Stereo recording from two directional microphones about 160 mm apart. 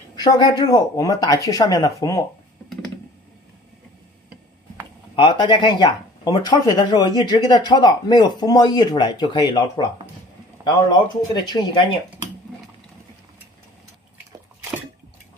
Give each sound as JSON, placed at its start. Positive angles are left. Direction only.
{"t": 0.1, "sound": "speech", "side_deg": 25}
{"t": 5.1, "sound": "speech", "side_deg": 30}
{"t": 11.4, "sound": "speech", "side_deg": 30}